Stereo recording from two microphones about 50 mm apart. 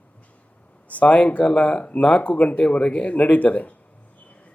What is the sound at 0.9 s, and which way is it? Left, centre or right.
Speech, left.